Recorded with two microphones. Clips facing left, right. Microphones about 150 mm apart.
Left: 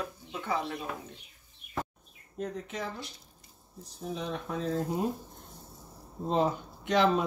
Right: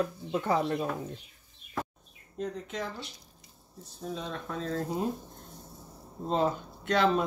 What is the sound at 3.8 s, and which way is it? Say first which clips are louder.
Speech: left 1 dB; 15° left (ahead or behind).